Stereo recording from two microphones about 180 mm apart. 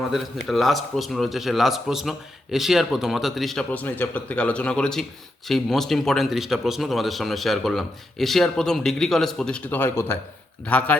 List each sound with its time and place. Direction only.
0.1 s speech: centre (ahead or behind)